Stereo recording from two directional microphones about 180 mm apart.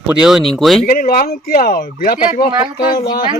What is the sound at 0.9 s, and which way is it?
Speech, 50° left (ahead or behind).